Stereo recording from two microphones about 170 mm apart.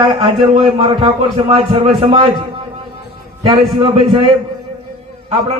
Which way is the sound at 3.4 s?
25° right (ahead or behind).